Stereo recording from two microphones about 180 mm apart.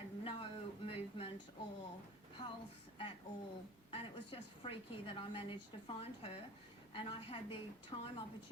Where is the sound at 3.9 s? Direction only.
30° left (ahead or behind).